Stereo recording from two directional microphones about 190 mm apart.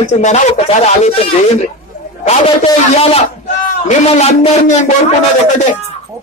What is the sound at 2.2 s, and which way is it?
A man's voice, 35° left (ahead or behind).